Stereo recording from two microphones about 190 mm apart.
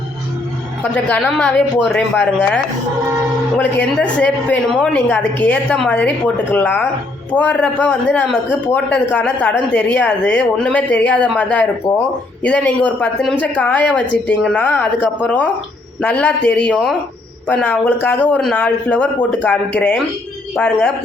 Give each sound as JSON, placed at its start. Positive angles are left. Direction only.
{"t": 0.9, "sound": "speech", "side_deg": 5}
{"t": 3.6, "sound": "a man's voice", "side_deg": 5}
{"t": 20.6, "sound": "speech", "side_deg": 5}